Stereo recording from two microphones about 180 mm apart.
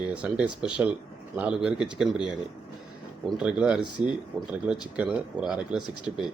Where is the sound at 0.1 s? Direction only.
5° right (ahead or behind).